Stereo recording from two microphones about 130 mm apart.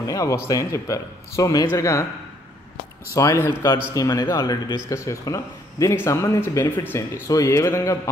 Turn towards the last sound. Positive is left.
turn(degrees=25)  # may be behind; listen again after turning